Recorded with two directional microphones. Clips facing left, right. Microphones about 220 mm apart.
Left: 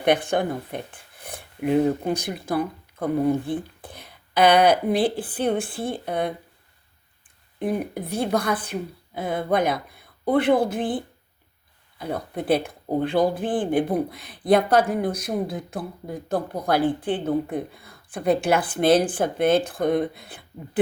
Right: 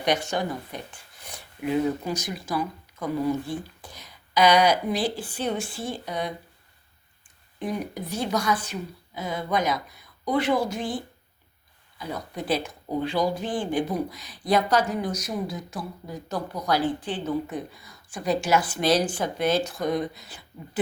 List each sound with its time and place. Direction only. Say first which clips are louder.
0.0 s speech: left 5 dB; 55° left (ahead or behind)
7.6 s speech: left 4 dB; 55° left (ahead or behind)